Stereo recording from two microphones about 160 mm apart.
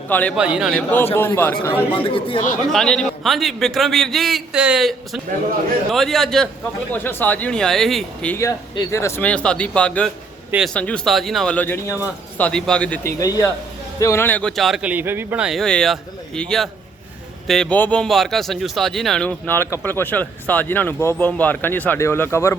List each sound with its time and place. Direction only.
0.1 s speech: 10° left (ahead or behind)
0.3 s speech: 5° right (ahead or behind)
0.7 s speech: 10° left (ahead or behind)
1.9 s speech: 35° left (ahead or behind)
2.7 s speech: 5° left (ahead or behind)
6.9 s speech: 10° left (ahead or behind)
8.4 s speech: 20° left (ahead or behind); by 13.0 s 5° left (ahead or behind)
13.0 s speech: 20° left (ahead or behind)